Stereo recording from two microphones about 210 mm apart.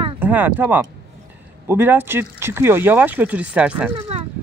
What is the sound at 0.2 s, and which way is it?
Speech, 10° right (ahead or behind).